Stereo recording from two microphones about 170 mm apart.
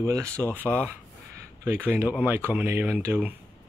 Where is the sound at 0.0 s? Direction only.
15° right (ahead or behind).